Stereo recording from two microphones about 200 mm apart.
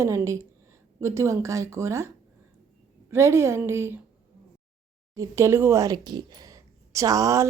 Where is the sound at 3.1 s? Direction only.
15° right (ahead or behind).